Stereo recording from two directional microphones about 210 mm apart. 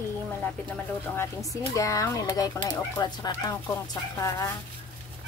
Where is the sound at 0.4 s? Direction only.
5° left (ahead or behind).